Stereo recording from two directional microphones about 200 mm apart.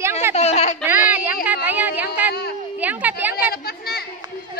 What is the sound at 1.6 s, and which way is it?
A woman's voice, 10° right (ahead or behind).